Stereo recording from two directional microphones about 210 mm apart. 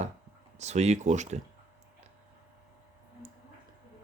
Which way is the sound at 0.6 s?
30° right (ahead or behind).